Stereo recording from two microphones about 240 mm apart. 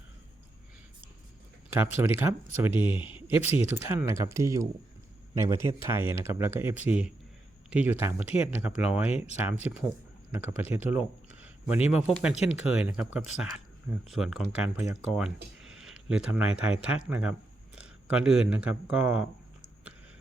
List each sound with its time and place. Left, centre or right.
1.7 s speech: centre
2.7 s speech: left
3.2 s speech: centre